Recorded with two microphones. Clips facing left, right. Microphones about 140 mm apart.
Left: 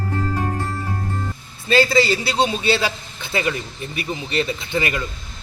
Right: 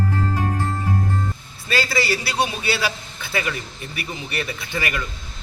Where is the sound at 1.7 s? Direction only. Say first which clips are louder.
Left 6 dB; 20° left (ahead or behind).